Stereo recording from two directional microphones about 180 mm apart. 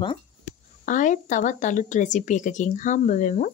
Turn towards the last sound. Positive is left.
turn(degrees=45)  # may be behind; listen again after turning